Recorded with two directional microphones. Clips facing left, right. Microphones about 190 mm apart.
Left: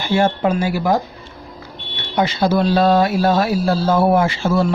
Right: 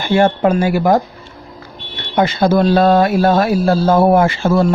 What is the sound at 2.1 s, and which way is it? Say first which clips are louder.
Speech: right 4 dB; 55° right (ahead or behind).